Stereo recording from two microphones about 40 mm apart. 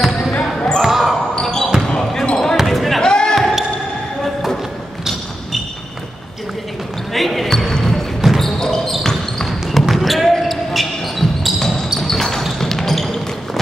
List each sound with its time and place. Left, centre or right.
0.3 s basketball bounce: left
0.8 s basketball bounce: centre
1.4 s basketball bounce: centre
2.5 s basketball bounce: centre
3.0 s basketball bounce: left
3.3 s basketball bounce: centre
7.2 s basketball bounce: centre